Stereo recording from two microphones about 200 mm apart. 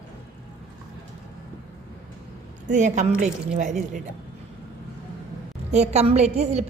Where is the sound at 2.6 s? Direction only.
35° right (ahead or behind).